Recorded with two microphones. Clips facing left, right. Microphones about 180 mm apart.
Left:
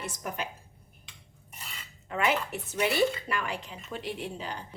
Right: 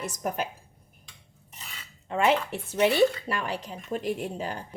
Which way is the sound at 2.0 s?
30° right (ahead or behind).